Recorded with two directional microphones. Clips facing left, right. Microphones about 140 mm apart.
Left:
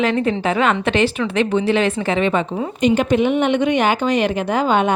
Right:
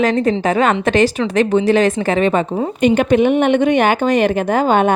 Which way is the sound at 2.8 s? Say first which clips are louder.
Right 3 dB; 55° right (ahead or behind).